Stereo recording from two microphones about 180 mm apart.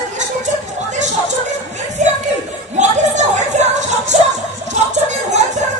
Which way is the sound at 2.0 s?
40° right (ahead or behind).